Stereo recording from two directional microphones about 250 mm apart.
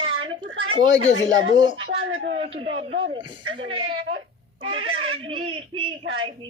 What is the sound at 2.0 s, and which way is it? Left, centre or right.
Speech, right.